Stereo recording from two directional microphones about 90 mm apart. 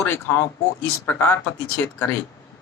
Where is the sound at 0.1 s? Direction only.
30° left (ahead or behind).